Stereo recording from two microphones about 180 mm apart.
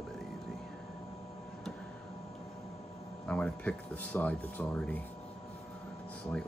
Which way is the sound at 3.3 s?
5° left (ahead or behind).